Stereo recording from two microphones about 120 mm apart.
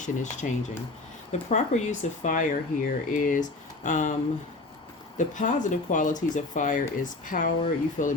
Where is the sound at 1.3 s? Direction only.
75° left (ahead or behind); by 4.1 s 90° left.